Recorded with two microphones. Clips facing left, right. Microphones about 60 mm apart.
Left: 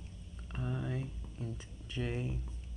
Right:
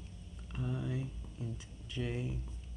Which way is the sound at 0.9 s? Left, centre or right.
Left.